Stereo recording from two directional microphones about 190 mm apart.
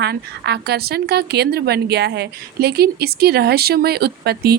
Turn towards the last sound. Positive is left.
turn(degrees=-55)  # may be behind; listen again after turning